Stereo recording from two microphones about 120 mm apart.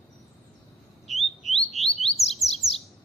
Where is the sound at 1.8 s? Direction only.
Centre (ahead or behind).